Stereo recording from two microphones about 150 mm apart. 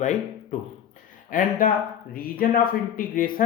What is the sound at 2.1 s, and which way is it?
Speech, 80° left.